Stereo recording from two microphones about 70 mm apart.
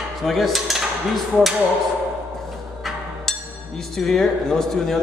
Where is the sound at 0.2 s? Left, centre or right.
Centre.